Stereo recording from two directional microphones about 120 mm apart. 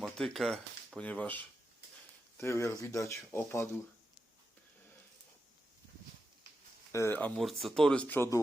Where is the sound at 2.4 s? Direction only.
25° left (ahead or behind).